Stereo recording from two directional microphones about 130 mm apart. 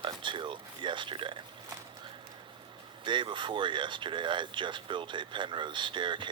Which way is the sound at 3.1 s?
40° right (ahead or behind).